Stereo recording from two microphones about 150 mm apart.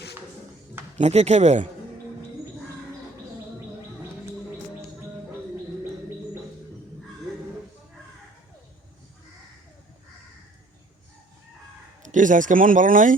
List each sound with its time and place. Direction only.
0.9 s speech: 45° right (ahead or behind)
12.0 s speech: 60° right (ahead or behind)